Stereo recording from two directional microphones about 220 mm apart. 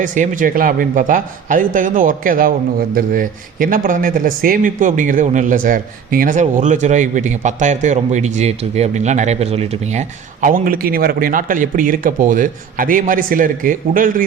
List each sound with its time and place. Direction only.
0.0 s speech: 35° right (ahead or behind)